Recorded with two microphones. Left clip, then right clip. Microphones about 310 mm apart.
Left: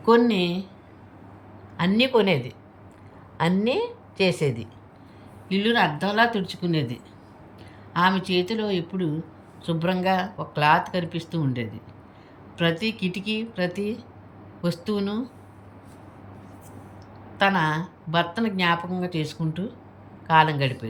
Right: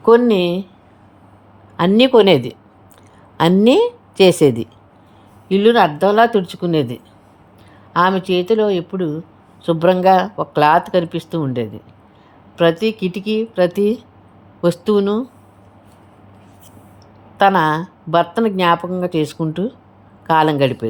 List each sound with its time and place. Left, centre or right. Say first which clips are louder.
0.0 s speech: right 8 dB; centre
1.7 s speech: right 10 dB; centre
17.3 s speech: right 9 dB; centre